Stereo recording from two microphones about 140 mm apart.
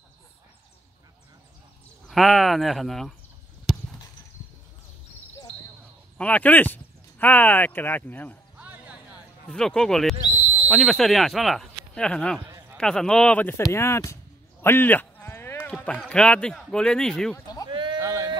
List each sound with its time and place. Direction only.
2.0 s speech: centre (ahead or behind)
3.7 s a sound: centre (ahead or behind)
6.1 s speech: 10° left (ahead or behind)
8.5 s music: 10° right (ahead or behind)
9.5 s speech: 5° left (ahead or behind); by 14.1 s 20° left (ahead or behind)
14.6 s a sound: 15° left (ahead or behind)
15.7 s run: 10° left (ahead or behind)
16.1 s speech: 5° left (ahead or behind)
17.6 s a sound: 35° right (ahead or behind)